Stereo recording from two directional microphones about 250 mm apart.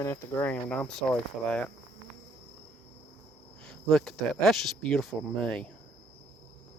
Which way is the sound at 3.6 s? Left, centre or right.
Centre.